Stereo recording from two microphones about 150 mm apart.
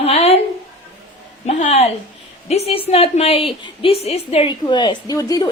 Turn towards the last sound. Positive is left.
turn(degrees=25)  # may be behind; listen again after turning